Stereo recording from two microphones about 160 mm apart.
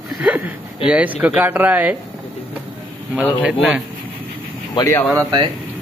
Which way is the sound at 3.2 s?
10° right (ahead or behind).